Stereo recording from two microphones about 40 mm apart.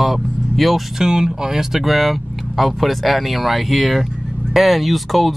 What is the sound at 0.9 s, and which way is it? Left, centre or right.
Speech, centre.